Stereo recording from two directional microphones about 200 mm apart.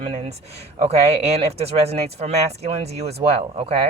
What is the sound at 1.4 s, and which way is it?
Speech, 30° right (ahead or behind).